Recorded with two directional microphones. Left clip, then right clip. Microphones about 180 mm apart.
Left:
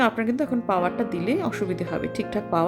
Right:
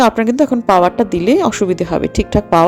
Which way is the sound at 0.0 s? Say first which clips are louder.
Right 11 dB; 35° right (ahead or behind).